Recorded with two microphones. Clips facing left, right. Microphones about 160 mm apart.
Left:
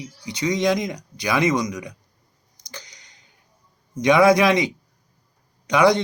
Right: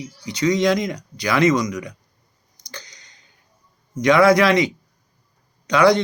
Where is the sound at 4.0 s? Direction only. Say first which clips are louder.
Right 1 dB; 20° left (ahead or behind).